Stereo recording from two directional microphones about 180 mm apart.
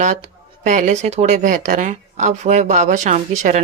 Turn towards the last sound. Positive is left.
turn(degrees=-40)  # may be behind; listen again after turning